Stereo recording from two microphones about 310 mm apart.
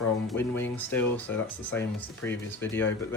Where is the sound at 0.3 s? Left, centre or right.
Centre.